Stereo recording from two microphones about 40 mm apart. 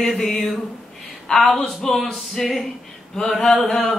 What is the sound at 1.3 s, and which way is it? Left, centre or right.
Singing, centre.